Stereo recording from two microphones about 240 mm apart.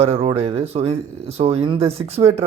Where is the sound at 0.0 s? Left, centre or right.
Right.